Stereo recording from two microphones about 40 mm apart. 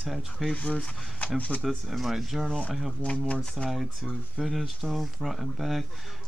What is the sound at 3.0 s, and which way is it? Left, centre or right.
Speech, left.